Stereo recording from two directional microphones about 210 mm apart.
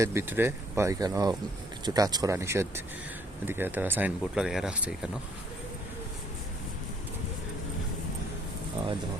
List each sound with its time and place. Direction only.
0.0 s speech: 10° right (ahead or behind)